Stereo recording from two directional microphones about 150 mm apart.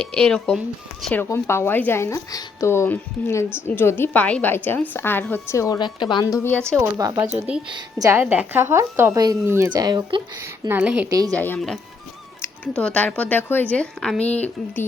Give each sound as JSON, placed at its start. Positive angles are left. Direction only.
{"t": 0.0, "sound": "speech", "side_deg": 5}
{"t": 1.1, "sound": "a woman's voice", "side_deg": 15}
{"t": 6.2, "sound": "a woman's voice", "side_deg": 15}
{"t": 6.7, "sound": "speech", "side_deg": -20}
{"t": 7.3, "sound": "speech", "side_deg": -5}
{"t": 7.8, "sound": "speech", "side_deg": -25}
{"t": 8.2, "sound": "speech", "side_deg": -10}
{"t": 10.4, "sound": "speech", "side_deg": -15}
{"t": 11.1, "sound": "speech", "side_deg": -25}
{"t": 11.3, "sound": "a woman's voice", "side_deg": 10}